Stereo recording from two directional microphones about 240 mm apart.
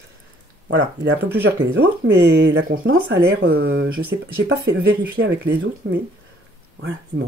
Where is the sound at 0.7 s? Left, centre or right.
Right.